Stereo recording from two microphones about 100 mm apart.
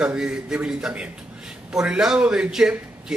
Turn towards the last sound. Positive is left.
turn(degrees=-5)  # may be behind; listen again after turning